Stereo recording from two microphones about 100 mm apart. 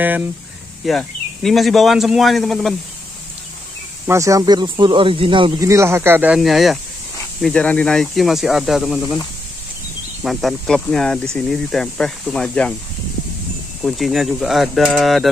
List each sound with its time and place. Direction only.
0.8 s speech: centre (ahead or behind)
4.1 s speech: 30° right (ahead or behind)
4.6 s speech: 50° right (ahead or behind)
5.6 s speech: 30° right (ahead or behind)
6.3 s speech: centre (ahead or behind)
7.4 s speech: 10° left (ahead or behind)
10.2 s speech: centre (ahead or behind)
13.8 s speech: centre (ahead or behind)